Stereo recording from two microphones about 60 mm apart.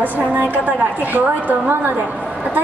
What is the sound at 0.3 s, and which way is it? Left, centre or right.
A woman's voice, right.